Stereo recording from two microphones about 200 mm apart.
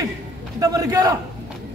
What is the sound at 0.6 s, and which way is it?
Speech, 15° right (ahead or behind).